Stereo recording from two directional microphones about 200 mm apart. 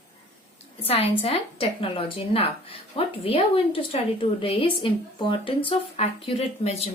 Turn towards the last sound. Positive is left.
turn(degrees=30)  # may be behind; listen again after turning